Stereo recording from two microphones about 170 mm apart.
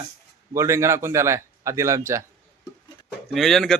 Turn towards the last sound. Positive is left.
turn(degrees=5)  # may be behind; listen again after turning